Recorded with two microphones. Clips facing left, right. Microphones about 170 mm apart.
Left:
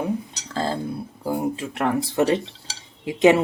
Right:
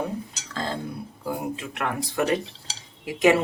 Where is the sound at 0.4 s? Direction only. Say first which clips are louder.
Left 7 dB; 35° left (ahead or behind).